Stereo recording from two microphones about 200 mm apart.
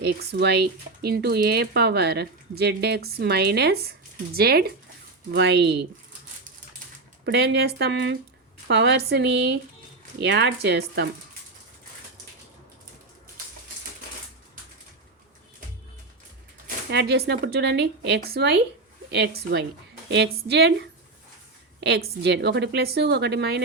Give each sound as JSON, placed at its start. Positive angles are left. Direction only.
{"t": 0.0, "sound": "speech", "side_deg": -55}
{"t": 7.3, "sound": "speech", "side_deg": -55}
{"t": 16.6, "sound": "speech", "side_deg": -55}
{"t": 21.8, "sound": "a sound", "side_deg": -55}
{"t": 22.2, "sound": "speech", "side_deg": -55}